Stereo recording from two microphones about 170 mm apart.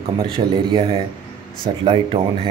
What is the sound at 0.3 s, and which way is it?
Speech, 30° right (ahead or behind).